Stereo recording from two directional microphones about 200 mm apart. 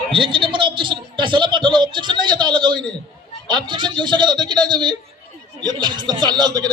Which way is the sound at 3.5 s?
20° right (ahead or behind).